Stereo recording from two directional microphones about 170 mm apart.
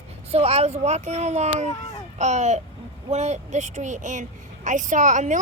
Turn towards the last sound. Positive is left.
turn(degrees=-45)  # may be behind; listen again after turning